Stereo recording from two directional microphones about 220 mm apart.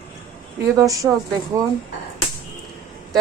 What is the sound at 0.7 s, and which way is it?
Speech, 15° right (ahead or behind).